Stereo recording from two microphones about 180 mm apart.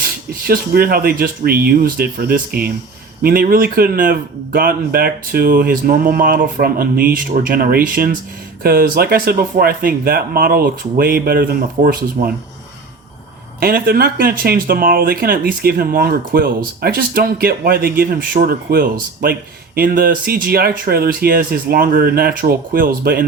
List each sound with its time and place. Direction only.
0.0 s speech: 55° right (ahead or behind)
13.6 s speech: 55° right (ahead or behind)